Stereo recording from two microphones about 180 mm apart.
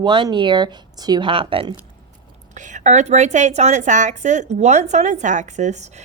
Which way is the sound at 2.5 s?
40° right (ahead or behind).